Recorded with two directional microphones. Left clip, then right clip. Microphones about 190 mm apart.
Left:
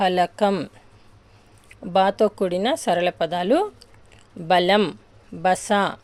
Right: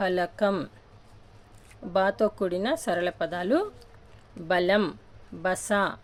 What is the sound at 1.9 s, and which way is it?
A woman's voice, 20° left (ahead or behind).